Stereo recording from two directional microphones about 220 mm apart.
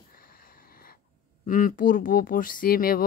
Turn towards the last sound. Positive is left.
turn(degrees=40)  # may be behind; listen again after turning